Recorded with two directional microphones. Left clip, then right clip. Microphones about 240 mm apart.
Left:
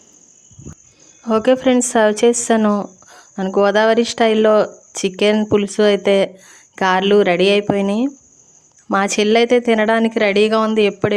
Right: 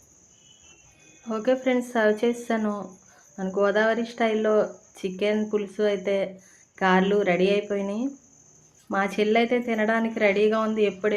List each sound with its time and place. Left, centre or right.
1.2 s a woman's voice: left